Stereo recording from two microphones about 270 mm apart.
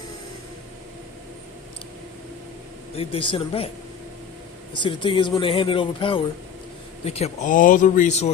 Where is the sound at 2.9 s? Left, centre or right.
Centre.